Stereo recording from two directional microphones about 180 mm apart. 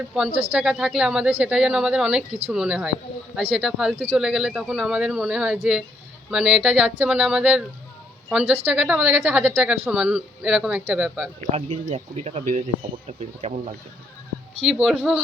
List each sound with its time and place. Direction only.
0.1 s a woman's voice: 5° right (ahead or behind)
11.9 s speech: 35° right (ahead or behind)
14.6 s speech: centre (ahead or behind)